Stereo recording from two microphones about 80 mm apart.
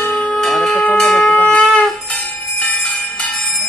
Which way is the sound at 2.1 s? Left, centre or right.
Centre.